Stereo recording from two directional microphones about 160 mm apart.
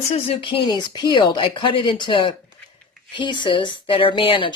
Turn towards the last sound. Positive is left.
turn(degrees=35)  # may be behind; listen again after turning